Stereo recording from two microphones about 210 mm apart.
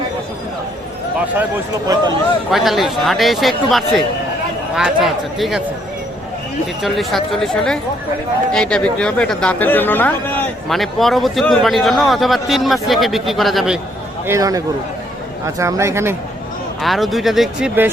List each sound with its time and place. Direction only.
1.9 s speech: 15° right (ahead or behind)
2.5 s speech: centre (ahead or behind)
6.8 s speech: centre (ahead or behind)
14.3 s speech: 15° right (ahead or behind)
16.8 s speech: centre (ahead or behind)